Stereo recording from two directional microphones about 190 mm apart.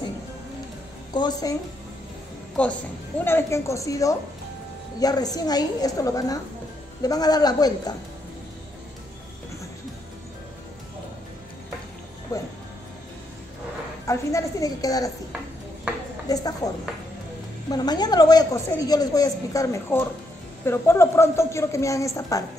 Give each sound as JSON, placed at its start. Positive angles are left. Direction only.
{"t": 1.1, "sound": "speech", "side_deg": 20}
{"t": 2.5, "sound": "a woman's voice", "side_deg": 5}
{"t": 12.3, "sound": "music", "side_deg": 15}
{"t": 14.0, "sound": "a woman's voice", "side_deg": 15}
{"t": 16.3, "sound": "a woman's voice", "side_deg": 20}